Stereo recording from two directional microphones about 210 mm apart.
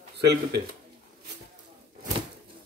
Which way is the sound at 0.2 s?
50° right (ahead or behind).